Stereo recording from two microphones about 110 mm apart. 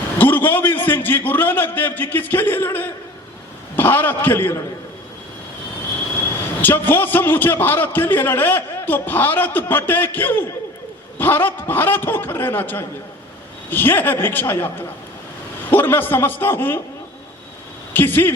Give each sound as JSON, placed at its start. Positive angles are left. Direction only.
{"t": 0.2, "sound": "a man's voice", "side_deg": 20}
{"t": 6.6, "sound": "a man's voice", "side_deg": 20}
{"t": 17.9, "sound": "a man's voice", "side_deg": 20}